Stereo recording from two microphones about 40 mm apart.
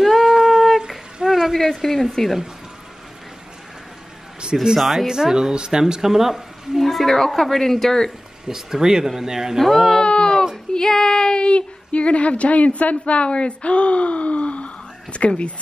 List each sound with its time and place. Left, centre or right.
0.0 s a sound: centre
1.7 s a woman's voice: centre
4.7 s a woman's voice: centre
5.0 s speech: centre
6.9 s speech: centre
8.5 s speech: centre
9.6 s a woman's voice: centre
10.0 s a sound: left
10.7 s speech: centre; by 15.5 s left